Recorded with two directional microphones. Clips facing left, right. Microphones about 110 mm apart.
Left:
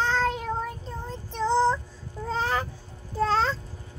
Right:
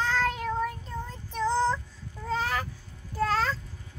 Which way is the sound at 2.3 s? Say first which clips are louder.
Left 2 dB; 30° left (ahead or behind).